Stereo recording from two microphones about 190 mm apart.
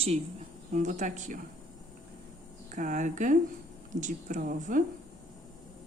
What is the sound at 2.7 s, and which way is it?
A woman's voice, 40° right (ahead or behind).